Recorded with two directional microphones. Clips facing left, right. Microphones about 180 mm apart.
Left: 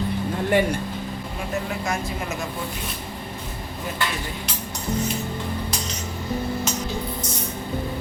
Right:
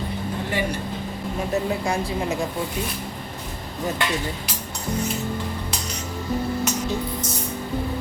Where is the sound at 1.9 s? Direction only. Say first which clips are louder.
Right 3 dB; 30° right (ahead or behind).